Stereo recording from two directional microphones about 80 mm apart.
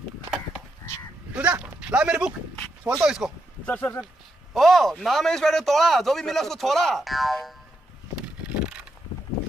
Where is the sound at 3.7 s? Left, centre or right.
Left.